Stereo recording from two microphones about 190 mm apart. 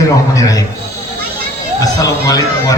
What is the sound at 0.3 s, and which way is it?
Speech, 20° left (ahead or behind).